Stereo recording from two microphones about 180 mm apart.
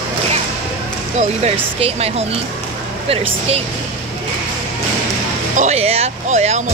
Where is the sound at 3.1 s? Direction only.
30° right (ahead or behind).